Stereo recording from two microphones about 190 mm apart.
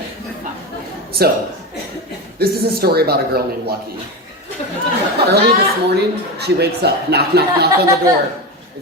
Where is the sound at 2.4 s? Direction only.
55° right (ahead or behind).